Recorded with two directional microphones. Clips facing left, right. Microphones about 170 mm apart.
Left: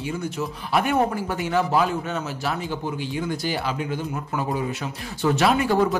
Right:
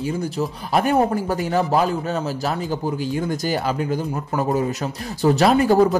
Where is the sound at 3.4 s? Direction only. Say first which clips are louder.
Right 4 dB; 45° right (ahead or behind).